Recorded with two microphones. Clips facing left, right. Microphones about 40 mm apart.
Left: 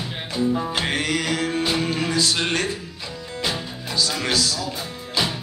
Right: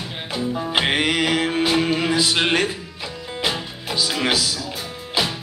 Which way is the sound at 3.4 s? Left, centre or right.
Centre.